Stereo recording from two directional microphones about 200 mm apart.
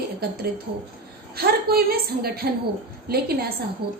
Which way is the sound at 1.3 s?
50° right (ahead or behind).